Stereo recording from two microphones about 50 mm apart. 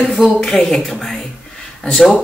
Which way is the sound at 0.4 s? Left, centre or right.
Centre.